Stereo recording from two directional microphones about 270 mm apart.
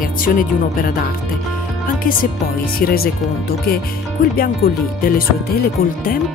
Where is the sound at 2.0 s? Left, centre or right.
Left.